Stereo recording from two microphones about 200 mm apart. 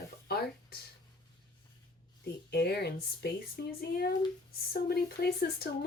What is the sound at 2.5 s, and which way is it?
Speech, 55° left (ahead or behind).